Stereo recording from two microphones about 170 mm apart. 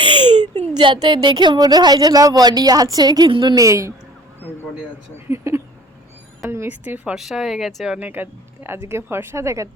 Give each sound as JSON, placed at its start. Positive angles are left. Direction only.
{"t": 0.0, "sound": "a sound", "side_deg": -30}
{"t": 0.8, "sound": "speech", "side_deg": -30}
{"t": 5.3, "sound": "speech", "side_deg": -15}